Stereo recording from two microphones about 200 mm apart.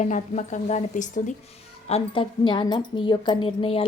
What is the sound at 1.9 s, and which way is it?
A woman's voice, 25° left (ahead or behind).